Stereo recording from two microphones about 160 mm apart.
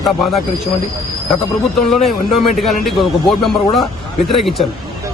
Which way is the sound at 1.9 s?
Centre (ahead or behind).